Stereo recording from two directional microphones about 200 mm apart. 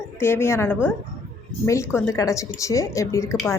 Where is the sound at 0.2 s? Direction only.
10° left (ahead or behind).